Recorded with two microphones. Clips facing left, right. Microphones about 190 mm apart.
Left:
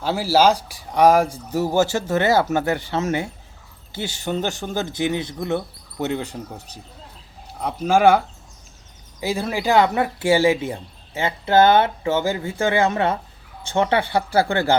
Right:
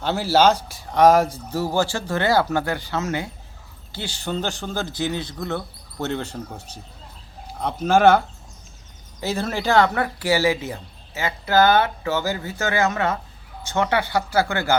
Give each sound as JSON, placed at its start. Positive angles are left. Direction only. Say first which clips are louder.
{"t": 0.0, "sound": "speech", "louder": "left 1 dB", "side_deg": 5}
{"t": 6.1, "sound": "speech", "louder": "left 1 dB", "side_deg": 10}
{"t": 7.6, "sound": "speech", "louder": "even", "side_deg": 5}
{"t": 9.2, "sound": "speech", "louder": "left 1 dB", "side_deg": 10}